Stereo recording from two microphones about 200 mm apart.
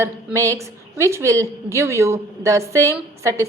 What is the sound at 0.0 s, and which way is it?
A woman's voice, 15° right (ahead or behind).